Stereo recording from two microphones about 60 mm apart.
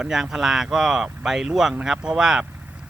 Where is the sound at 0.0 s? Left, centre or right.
Centre.